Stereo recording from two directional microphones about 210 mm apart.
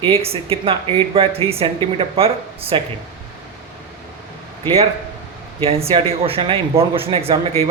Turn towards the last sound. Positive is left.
turn(degrees=-25)  # may be behind; listen again after turning